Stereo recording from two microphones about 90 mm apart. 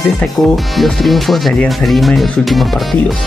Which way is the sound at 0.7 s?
Centre (ahead or behind).